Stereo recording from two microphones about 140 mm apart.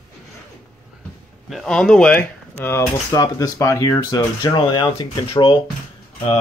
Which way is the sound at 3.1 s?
25° left (ahead or behind).